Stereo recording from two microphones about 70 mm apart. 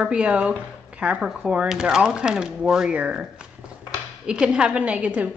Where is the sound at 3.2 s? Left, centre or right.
Centre.